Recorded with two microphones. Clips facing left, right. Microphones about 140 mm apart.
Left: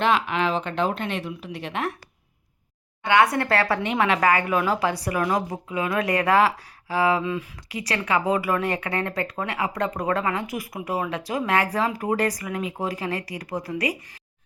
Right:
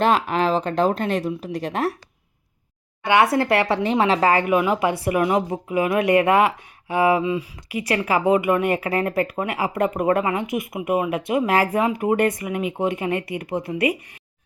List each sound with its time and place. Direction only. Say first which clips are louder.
0.0 s speech: right 3 dB; 40° right (ahead or behind)
3.0 s speech: right 2 dB; 20° right (ahead or behind)
4.4 s speech: right 4 dB; 15° right (ahead or behind)